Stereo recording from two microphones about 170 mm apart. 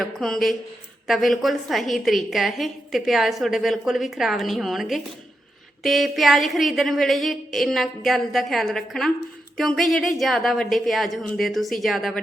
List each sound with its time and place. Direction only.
0.0 s a woman's voice: centre (ahead or behind)